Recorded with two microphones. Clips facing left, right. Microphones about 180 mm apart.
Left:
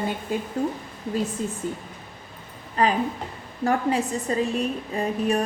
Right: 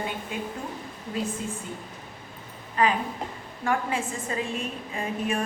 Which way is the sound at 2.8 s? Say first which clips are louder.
Left 2 dB; 35° left (ahead or behind).